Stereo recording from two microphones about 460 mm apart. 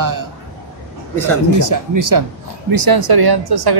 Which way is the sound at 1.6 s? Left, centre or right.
Right.